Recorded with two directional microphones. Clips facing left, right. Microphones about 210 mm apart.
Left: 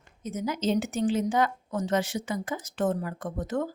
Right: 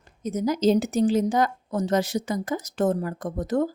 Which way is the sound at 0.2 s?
40° right (ahead or behind).